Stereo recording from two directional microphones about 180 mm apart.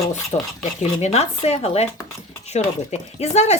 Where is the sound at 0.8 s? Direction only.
40° left (ahead or behind).